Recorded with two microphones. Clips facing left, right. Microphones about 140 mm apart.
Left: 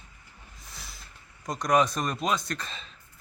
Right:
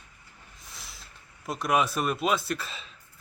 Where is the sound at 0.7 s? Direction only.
Centre (ahead or behind).